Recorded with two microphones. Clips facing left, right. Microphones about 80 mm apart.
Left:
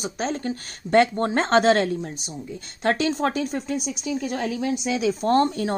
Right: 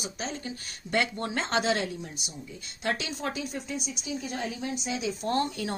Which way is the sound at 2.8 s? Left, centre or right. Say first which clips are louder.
Left 9 dB; left.